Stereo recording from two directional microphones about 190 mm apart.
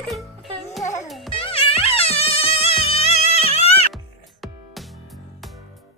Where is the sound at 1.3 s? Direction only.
30° left (ahead or behind).